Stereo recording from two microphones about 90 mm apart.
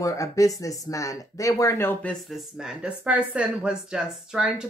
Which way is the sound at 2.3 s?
5° right (ahead or behind).